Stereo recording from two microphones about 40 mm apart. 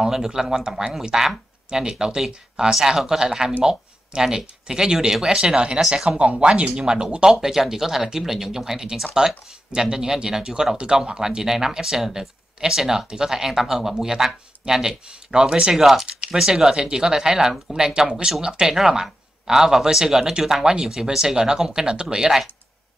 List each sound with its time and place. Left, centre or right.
0.0 s speech: centre
5.4 s speech: right
7.2 s speech: centre
16.1 s typing: right
16.3 s speech: centre